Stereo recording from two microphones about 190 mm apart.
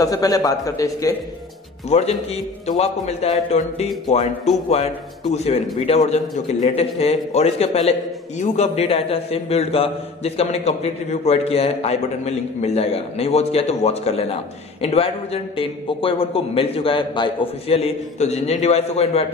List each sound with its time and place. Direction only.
0.0 s a man's voice: 20° left (ahead or behind)
1.9 s a man's voice: 35° left (ahead or behind)
5.3 s a man's voice: 35° left (ahead or behind)